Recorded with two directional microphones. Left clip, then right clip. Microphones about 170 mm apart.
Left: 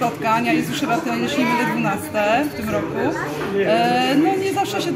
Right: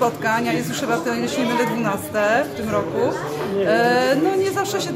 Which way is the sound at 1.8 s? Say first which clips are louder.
Even; 20° right (ahead or behind).